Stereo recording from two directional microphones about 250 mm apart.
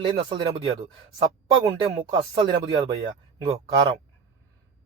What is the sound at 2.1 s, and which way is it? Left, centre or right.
Speech, centre.